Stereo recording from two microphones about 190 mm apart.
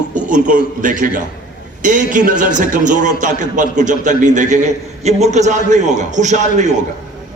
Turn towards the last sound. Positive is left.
turn(degrees=-40)  # may be behind; listen again after turning